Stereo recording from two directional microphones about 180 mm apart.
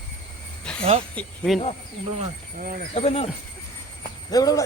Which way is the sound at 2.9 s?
35° left (ahead or behind).